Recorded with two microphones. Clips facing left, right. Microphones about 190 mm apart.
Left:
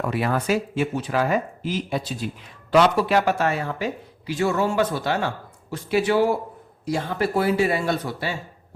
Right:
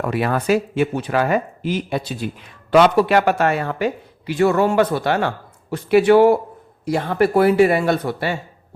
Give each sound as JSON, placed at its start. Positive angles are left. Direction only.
{"t": 0.0, "sound": "speech", "side_deg": -65}